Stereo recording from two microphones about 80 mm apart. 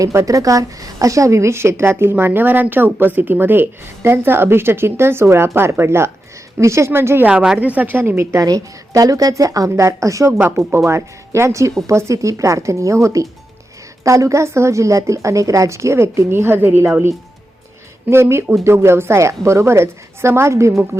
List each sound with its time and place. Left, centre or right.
0.0 s a woman's voice: right
7.3 s a woman's voice: centre; by 8.4 s right
8.4 s a woman's voice: right
18.1 s a woman's voice: right